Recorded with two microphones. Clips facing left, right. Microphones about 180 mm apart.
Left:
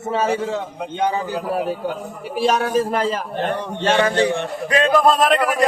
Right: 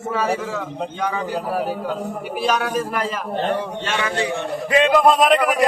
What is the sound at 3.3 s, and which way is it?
Speech, 10° right (ahead or behind).